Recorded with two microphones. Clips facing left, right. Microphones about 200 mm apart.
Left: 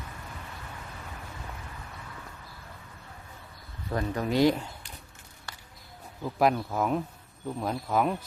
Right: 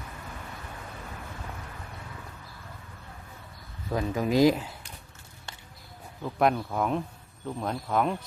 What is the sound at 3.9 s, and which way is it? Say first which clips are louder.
Speech: right 2 dB; 5° right (ahead or behind).